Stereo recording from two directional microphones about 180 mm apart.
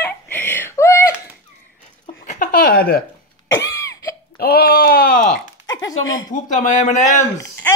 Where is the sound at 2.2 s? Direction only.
50° left (ahead or behind).